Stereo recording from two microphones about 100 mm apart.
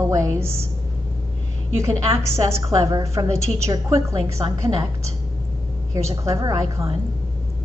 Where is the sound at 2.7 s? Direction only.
35° right (ahead or behind).